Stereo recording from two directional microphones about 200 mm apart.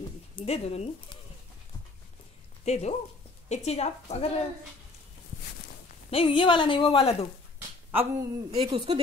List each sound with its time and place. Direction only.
0.4 s a woman's voice: 30° left (ahead or behind)
2.6 s a woman's voice: 35° left (ahead or behind)
6.0 s a woman's voice: 30° left (ahead or behind)
7.5 s speech: 10° right (ahead or behind)
8.5 s speech: 25° right (ahead or behind)